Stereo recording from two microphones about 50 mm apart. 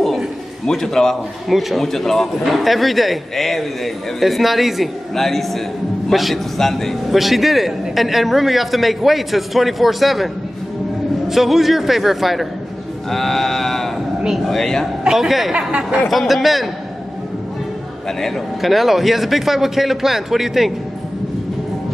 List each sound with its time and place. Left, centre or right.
0.7 s a man's voice: centre
1.5 s a man's voice: centre
1.9 s a man's voice: centre
15.0 s a man's voice: centre
15.5 s speech: right
16.1 s a man's voice: centre
18.2 s a man's voice: centre